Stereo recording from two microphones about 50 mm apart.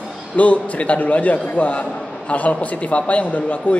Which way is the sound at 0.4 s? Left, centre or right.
Left.